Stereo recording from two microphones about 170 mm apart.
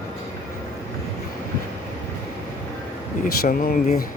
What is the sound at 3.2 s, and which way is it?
Speech, 55° left (ahead or behind).